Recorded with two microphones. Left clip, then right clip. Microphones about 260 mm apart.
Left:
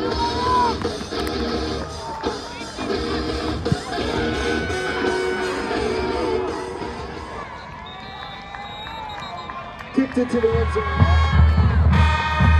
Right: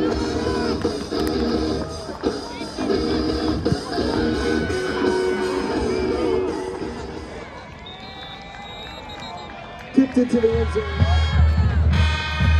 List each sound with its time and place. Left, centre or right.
0.1 s music: right
5.9 s music: centre
9.9 s music: centre
10.8 s music: left